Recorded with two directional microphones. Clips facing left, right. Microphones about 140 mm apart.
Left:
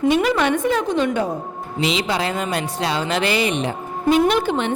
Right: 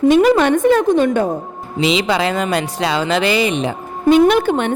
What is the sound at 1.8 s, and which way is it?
Speech, 90° right.